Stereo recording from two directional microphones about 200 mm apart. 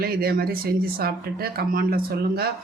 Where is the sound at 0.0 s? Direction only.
50° right (ahead or behind).